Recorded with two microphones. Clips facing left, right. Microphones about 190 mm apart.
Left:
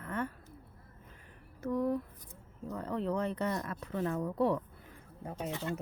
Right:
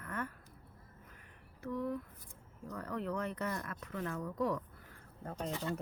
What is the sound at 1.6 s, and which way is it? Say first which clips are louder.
Speech: left 6 dB; 40° left (ahead or behind).